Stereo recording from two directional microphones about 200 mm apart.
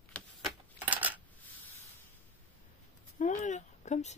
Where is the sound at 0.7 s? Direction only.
10° right (ahead or behind).